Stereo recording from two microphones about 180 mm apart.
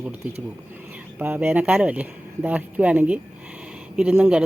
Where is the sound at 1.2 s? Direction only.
10° right (ahead or behind).